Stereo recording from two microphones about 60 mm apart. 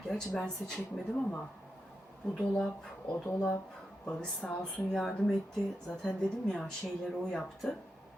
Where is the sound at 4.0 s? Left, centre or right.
Centre.